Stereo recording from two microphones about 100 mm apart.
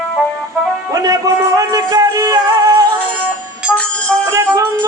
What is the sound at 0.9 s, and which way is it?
Music, 35° right (ahead or behind).